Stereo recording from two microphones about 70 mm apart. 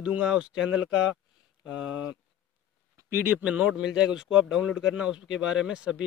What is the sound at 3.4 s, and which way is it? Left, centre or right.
Speech, centre.